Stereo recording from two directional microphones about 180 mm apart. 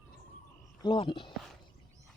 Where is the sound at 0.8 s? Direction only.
25° left (ahead or behind).